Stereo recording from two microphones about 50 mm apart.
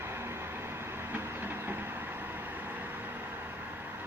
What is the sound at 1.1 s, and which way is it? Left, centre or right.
Train, right.